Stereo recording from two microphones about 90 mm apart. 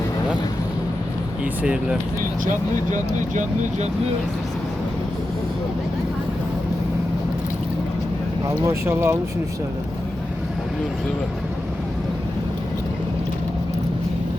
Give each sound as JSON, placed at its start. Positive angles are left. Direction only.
{"t": 1.6, "sound": "speech", "side_deg": -10}
{"t": 8.6, "sound": "speech", "side_deg": -25}